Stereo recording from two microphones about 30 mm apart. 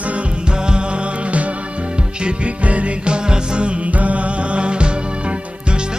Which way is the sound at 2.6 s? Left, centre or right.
Right.